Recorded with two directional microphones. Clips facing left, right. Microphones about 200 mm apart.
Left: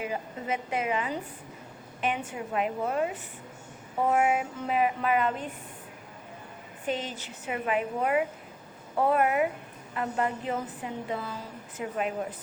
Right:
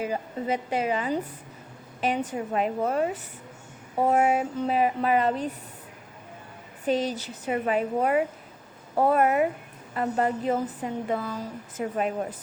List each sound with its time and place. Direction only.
0.0 s a woman's voice: 35° right (ahead or behind)
4.1 s a woman's voice: 35° right (ahead or behind)
6.8 s a woman's voice: 35° right (ahead or behind)